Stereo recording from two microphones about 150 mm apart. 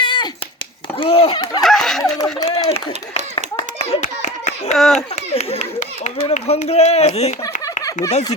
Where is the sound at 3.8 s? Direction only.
45° left (ahead or behind).